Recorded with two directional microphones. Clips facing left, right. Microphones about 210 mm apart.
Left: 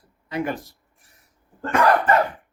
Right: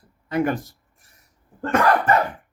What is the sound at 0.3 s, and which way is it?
Speech, 50° right (ahead or behind).